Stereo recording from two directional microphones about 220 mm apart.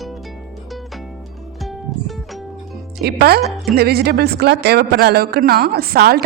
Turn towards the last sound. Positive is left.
turn(degrees=-45)  # may be behind; listen again after turning